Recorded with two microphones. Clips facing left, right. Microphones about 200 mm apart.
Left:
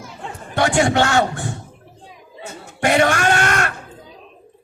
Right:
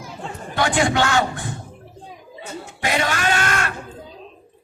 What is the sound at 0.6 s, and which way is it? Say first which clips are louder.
Speech: left 3 dB; 60° left (ahead or behind).